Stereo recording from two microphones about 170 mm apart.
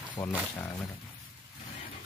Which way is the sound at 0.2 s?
20° left (ahead or behind).